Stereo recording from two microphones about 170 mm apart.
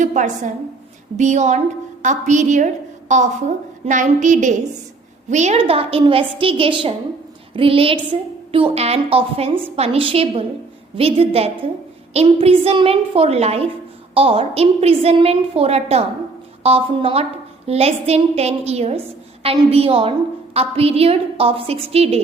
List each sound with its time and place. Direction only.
0.0 s a woman's voice: 45° right (ahead or behind)